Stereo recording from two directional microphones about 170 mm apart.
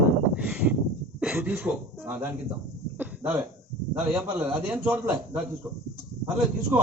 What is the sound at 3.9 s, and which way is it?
A man's voice, 10° right (ahead or behind).